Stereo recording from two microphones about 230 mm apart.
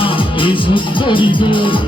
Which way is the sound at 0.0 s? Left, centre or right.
Left.